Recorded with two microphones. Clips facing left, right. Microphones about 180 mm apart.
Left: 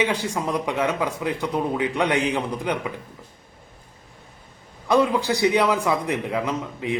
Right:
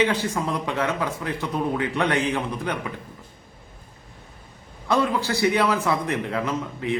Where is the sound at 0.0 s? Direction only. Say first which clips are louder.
Right 1 dB; 15° left (ahead or behind).